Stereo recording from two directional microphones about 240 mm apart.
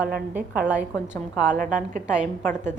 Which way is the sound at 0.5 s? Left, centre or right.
Centre.